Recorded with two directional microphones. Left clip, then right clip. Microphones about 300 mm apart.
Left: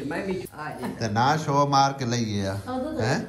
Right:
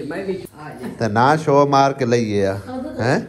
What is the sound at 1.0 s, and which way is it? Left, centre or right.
A man's voice, centre.